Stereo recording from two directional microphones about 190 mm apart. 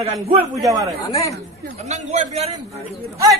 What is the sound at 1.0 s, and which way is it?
Speech, 15° left (ahead or behind).